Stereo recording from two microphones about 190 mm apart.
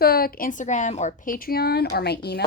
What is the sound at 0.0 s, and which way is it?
A woman's voice, 50° left (ahead or behind).